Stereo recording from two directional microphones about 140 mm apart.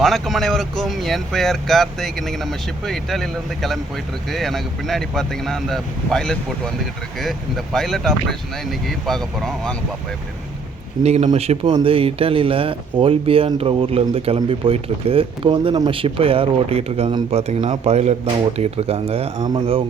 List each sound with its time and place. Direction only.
0.0 s speech: centre (ahead or behind)
11.0 s speech: 50° right (ahead or behind); by 19.8 s 35° right (ahead or behind)